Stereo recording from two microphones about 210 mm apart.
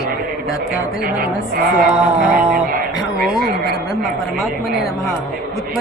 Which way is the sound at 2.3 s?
45° right (ahead or behind).